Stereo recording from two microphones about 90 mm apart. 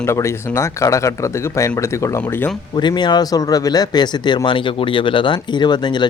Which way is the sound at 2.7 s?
55° left (ahead or behind).